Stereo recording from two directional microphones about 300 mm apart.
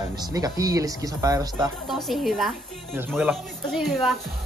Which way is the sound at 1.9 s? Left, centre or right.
Centre.